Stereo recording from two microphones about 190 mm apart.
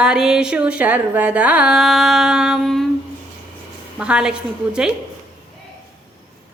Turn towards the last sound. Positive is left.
turn(degrees=-5)  # may be behind; listen again after turning